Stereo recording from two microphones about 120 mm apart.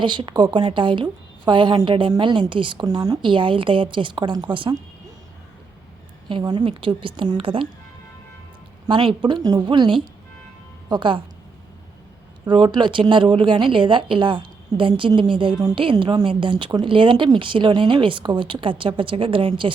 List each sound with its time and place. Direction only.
0.0 s speech: 40° right (ahead or behind)
6.2 s a woman's voice: 40° right (ahead or behind)
9.2 s a woman's voice: 35° right (ahead or behind)
12.5 s speech: 40° right (ahead or behind)